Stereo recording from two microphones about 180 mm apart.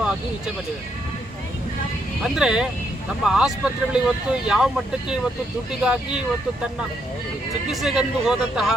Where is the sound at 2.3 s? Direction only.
5° right (ahead or behind).